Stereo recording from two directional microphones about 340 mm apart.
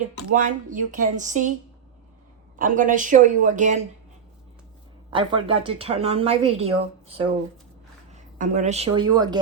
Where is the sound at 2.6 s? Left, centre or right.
Right.